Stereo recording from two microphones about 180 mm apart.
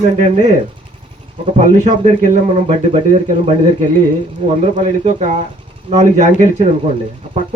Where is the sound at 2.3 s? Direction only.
40° right (ahead or behind).